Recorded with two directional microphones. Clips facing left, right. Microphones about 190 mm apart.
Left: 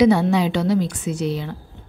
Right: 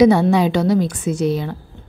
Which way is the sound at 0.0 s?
45° right (ahead or behind).